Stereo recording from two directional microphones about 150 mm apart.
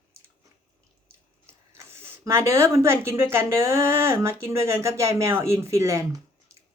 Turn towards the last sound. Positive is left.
turn(degrees=-20)  # may be behind; listen again after turning